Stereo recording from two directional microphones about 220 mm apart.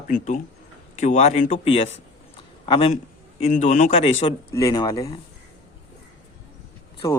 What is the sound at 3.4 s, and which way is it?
Speech, 35° left (ahead or behind).